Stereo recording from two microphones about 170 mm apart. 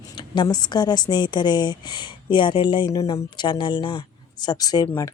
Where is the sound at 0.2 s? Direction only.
25° left (ahead or behind).